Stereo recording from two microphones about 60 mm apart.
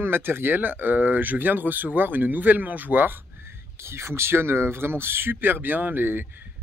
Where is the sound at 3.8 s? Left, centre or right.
Right.